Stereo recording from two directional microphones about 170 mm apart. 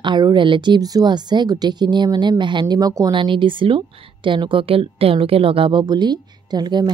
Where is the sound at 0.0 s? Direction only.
25° right (ahead or behind).